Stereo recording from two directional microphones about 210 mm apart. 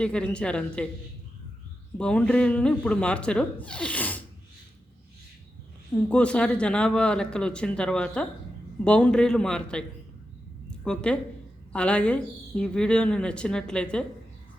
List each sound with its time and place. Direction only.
0.0 s a woman's voice: 5° left (ahead or behind)
2.0 s a woman's voice: 5° left (ahead or behind)
6.1 s a woman's voice: 5° left (ahead or behind)